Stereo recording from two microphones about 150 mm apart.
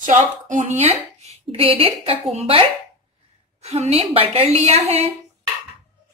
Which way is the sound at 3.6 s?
45° right (ahead or behind).